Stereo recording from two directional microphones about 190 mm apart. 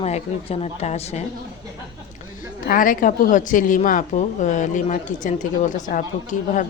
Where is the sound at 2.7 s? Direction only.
45° left (ahead or behind).